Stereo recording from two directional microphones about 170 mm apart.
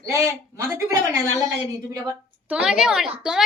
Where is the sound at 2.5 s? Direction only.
5° right (ahead or behind).